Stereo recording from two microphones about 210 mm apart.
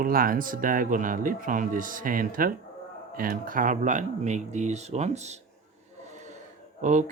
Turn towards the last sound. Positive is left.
turn(degrees=-35)  # may be behind; listen again after turning